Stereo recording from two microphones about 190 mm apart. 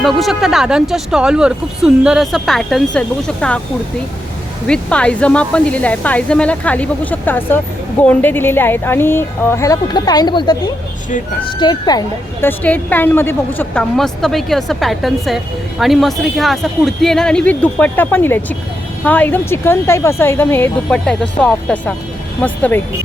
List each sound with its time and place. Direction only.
0.0 s speech: centre (ahead or behind)
4.6 s a woman's voice: 5° left (ahead or behind); by 10.6 s 20° left (ahead or behind)
11.6 s a woman's voice: 20° left (ahead or behind)